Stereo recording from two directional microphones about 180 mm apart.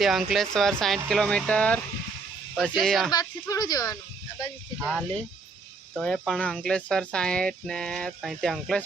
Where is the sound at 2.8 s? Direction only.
Centre (ahead or behind).